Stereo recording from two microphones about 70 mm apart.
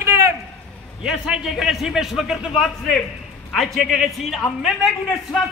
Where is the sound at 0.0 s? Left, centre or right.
Right.